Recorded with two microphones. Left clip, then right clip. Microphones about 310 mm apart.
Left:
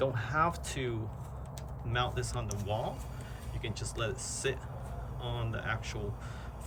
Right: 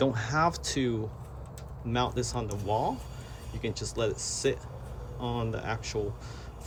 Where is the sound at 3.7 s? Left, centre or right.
Centre.